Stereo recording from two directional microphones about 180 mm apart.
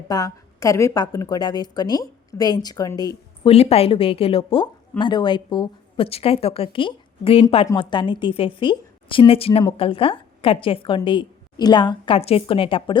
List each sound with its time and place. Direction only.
0.1 s a woman's voice: 20° left (ahead or behind)
3.4 s a woman's voice: 35° left (ahead or behind)